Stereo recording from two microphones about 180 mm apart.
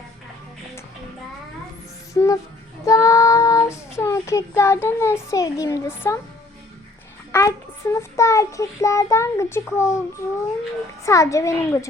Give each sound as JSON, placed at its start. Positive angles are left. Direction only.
{"t": 2.1, "sound": "music", "side_deg": 20}
{"t": 2.8, "sound": "child singing", "side_deg": 20}
{"t": 7.3, "sound": "child singing", "side_deg": 15}
{"t": 11.0, "sound": "child singing", "side_deg": 15}